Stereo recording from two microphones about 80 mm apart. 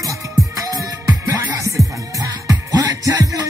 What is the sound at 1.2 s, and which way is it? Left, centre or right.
Music, right.